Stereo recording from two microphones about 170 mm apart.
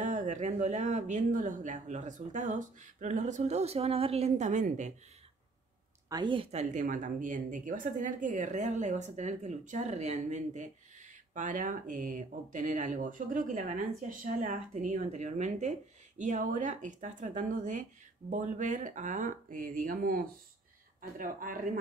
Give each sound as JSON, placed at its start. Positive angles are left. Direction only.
{"t": 0.0, "sound": "speech", "side_deg": -50}
{"t": 6.0, "sound": "speech", "side_deg": -25}